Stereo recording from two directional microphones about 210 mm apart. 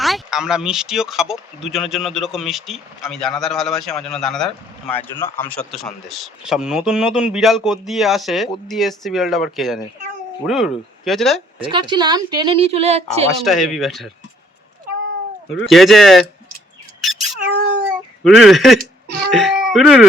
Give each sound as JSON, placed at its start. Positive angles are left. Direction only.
{"t": 0.0, "sound": "a man's voice", "side_deg": 0}
{"t": 11.6, "sound": "speech", "side_deg": -20}
{"t": 13.4, "sound": "a man's voice", "side_deg": 0}
{"t": 15.6, "sound": "a man's voice", "side_deg": 0}
{"t": 17.0, "sound": "cat", "side_deg": 0}
{"t": 18.2, "sound": "a man's voice", "side_deg": 0}
{"t": 18.8, "sound": "chuckle", "side_deg": -45}
{"t": 19.3, "sound": "chicken", "side_deg": 0}